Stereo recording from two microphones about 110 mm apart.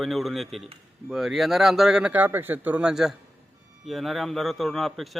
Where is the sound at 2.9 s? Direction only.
5° right (ahead or behind).